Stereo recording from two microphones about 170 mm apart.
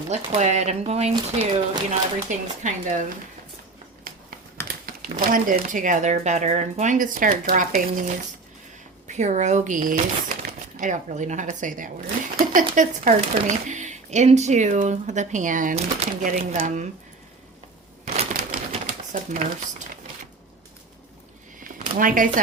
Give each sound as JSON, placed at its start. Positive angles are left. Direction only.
{"t": 0.1, "sound": "speech", "side_deg": -40}
{"t": 2.3, "sound": "speech", "side_deg": -45}
{"t": 4.9, "sound": "speech", "side_deg": -55}
{"t": 18.0, "sound": "typewriter", "side_deg": -40}
{"t": 21.6, "sound": "a sound", "side_deg": -55}